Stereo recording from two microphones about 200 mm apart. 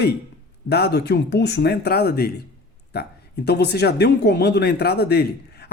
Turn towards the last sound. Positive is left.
turn(degrees=55)  # may be behind; listen again after turning